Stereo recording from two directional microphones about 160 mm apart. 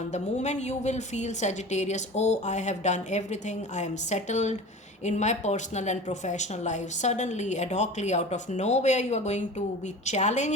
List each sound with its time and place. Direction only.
0.1 s speech: 45° left (ahead or behind)